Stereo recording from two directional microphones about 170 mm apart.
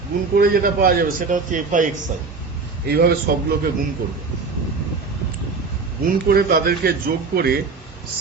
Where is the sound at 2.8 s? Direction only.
65° right (ahead or behind).